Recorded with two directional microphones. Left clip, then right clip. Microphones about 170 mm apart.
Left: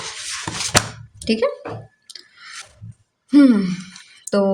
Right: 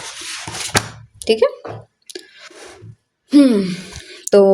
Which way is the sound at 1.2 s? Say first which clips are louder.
Right 6 dB; 40° right (ahead or behind).